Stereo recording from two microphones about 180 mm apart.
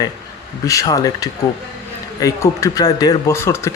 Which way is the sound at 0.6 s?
20° left (ahead or behind).